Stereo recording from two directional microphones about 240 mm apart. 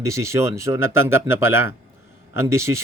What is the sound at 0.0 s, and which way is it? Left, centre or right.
A man's voice, centre.